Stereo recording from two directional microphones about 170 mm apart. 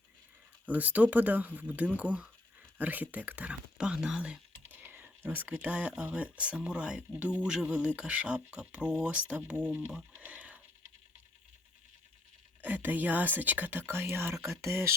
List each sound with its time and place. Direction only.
0.6 s speech: 10° right (ahead or behind)
12.6 s speech: 10° right (ahead or behind)